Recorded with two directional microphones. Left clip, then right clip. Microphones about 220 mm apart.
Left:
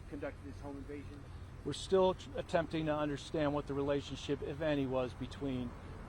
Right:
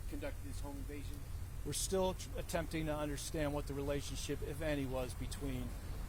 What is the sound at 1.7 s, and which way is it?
Speech, 30° left (ahead or behind).